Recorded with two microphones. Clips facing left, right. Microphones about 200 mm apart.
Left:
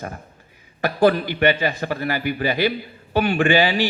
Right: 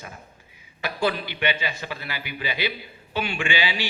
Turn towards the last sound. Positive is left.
turn(degrees=45)  # may be behind; listen again after turning